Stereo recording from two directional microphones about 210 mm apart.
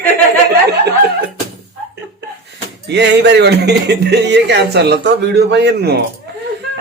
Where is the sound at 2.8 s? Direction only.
55° right (ahead or behind).